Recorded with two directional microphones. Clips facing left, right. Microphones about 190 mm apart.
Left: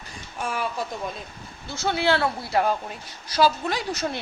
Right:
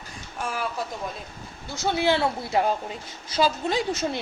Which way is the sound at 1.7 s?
15° right (ahead or behind).